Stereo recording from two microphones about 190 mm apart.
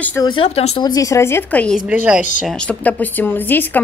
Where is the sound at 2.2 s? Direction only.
40° left (ahead or behind).